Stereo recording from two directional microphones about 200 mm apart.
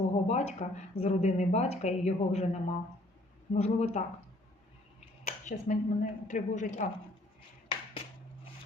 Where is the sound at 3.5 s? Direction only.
30° left (ahead or behind).